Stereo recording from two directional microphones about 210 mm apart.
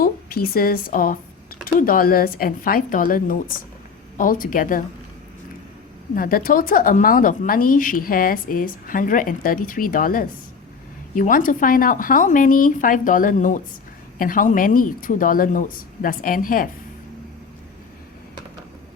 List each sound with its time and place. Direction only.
0.0 s speech: 45° left (ahead or behind)
6.1 s speech: 40° left (ahead or behind)